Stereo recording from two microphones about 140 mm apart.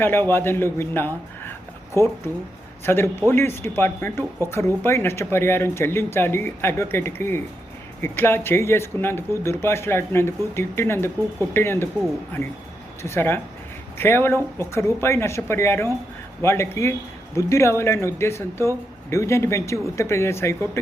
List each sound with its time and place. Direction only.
0.0 s speech: 15° left (ahead or behind)
13.0 s speech: 15° left (ahead or behind)